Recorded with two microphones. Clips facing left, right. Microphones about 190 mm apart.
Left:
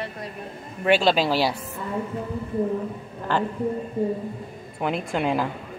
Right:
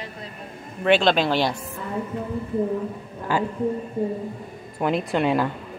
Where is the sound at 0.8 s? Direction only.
5° left (ahead or behind).